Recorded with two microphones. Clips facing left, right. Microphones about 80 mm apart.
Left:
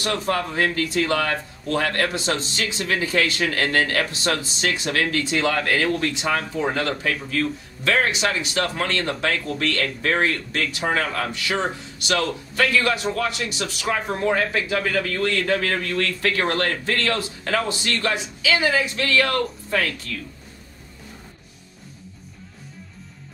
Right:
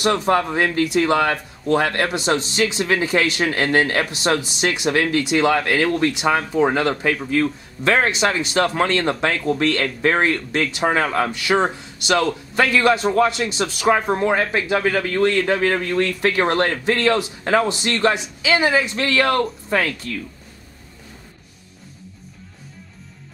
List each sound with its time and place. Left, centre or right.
0.0 s a man's voice: right